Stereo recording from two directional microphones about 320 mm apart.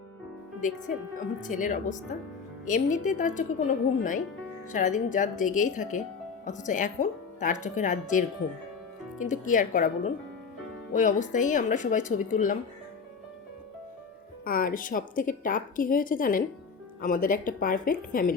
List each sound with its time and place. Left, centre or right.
0.6 s a woman's voice: left
9.2 s a woman's voice: left
14.4 s a woman's voice: left